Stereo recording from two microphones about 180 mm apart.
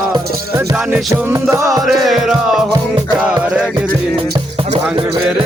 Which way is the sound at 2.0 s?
Centre (ahead or behind).